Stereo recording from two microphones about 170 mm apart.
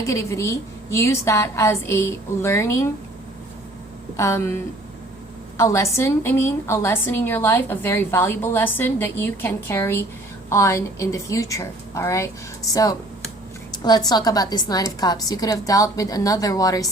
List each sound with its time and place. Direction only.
0.0 s a woman's voice: 15° left (ahead or behind)
4.2 s a woman's voice: 15° left (ahead or behind)